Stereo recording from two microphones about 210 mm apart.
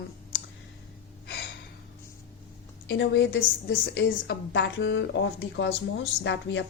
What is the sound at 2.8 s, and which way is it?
Speech, 60° left (ahead or behind).